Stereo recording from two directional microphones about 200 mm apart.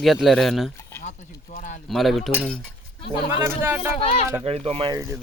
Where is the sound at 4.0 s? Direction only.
30° left (ahead or behind).